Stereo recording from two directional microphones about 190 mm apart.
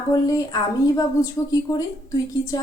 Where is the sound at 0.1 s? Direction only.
20° left (ahead or behind).